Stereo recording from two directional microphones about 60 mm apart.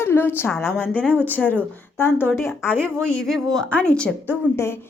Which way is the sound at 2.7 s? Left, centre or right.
Centre.